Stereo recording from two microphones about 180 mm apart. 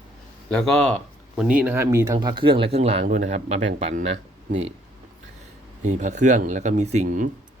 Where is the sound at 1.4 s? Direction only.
5° right (ahead or behind); by 4.1 s 40° right (ahead or behind).